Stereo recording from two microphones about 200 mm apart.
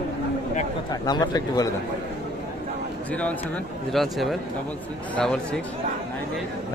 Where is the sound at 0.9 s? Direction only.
20° left (ahead or behind).